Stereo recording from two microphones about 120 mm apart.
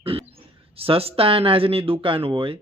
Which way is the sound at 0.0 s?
50° right (ahead or behind).